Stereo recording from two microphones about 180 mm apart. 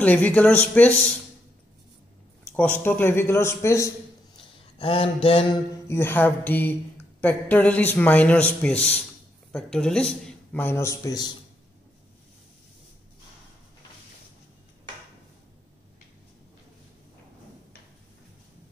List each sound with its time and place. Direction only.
0.0 s speech: 10° left (ahead or behind)
2.5 s speech: 10° left (ahead or behind)
4.7 s mantra: 30° left (ahead or behind)
5.9 s speech: 15° left (ahead or behind)